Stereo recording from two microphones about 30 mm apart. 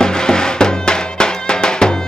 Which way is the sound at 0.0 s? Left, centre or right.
Left.